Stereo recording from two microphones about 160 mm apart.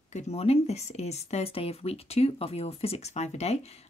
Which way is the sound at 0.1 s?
45° left (ahead or behind).